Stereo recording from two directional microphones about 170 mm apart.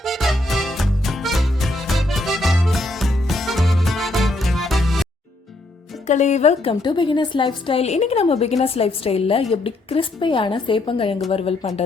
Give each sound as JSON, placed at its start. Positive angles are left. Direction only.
{"t": 0.0, "sound": "music", "side_deg": 0}
{"t": 6.1, "sound": "speech", "side_deg": 45}
{"t": 6.8, "sound": "a woman's voice", "side_deg": 25}